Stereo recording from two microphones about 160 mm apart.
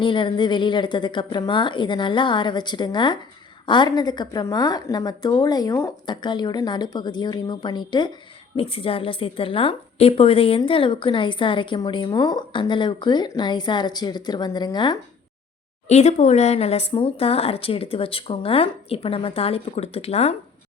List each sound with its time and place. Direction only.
0.0 s a woman's voice: 30° left (ahead or behind)
15.9 s speech: 45° left (ahead or behind)